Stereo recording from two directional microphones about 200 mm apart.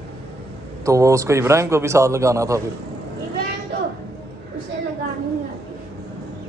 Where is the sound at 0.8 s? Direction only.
15° right (ahead or behind).